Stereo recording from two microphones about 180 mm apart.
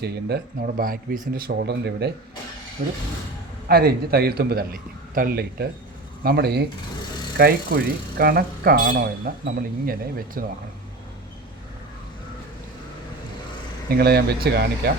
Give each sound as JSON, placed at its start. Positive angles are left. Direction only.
{"t": 0.0, "sound": "speech", "side_deg": -65}
{"t": 2.8, "sound": "speech", "side_deg": -55}
{"t": 13.9, "sound": "speech", "side_deg": -65}